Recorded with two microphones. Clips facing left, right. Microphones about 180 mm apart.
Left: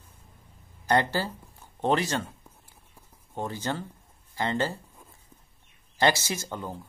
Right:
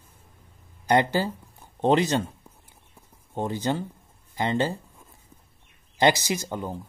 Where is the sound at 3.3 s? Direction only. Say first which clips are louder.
Right 5 dB; 15° right (ahead or behind).